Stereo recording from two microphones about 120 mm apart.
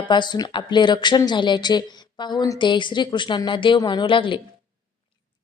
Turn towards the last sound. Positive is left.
turn(degrees=45)  # may be behind; listen again after turning